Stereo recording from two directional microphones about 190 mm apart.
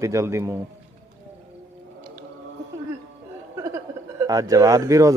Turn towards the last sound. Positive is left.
turn(degrees=-15)  # may be behind; listen again after turning